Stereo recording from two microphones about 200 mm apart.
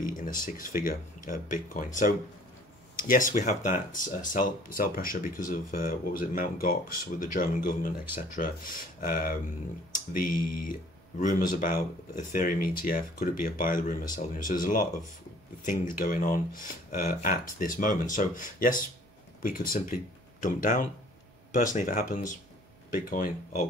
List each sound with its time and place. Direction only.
0.0 s speech: 45° left (ahead or behind)